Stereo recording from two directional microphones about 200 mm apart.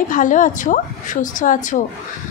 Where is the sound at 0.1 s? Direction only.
40° left (ahead or behind).